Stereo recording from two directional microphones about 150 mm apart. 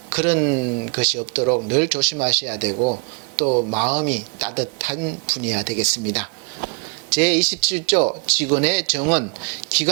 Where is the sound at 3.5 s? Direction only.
35° right (ahead or behind).